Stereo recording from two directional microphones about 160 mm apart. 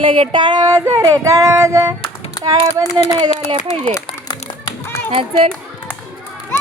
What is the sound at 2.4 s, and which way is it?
Speech, 25° right (ahead or behind).